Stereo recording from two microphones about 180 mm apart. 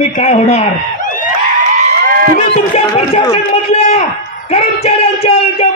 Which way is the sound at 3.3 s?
35° left (ahead or behind).